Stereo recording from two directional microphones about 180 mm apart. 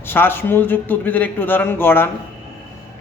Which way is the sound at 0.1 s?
10° left (ahead or behind).